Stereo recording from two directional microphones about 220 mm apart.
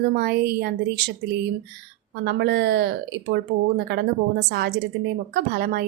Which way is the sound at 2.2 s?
50° right (ahead or behind).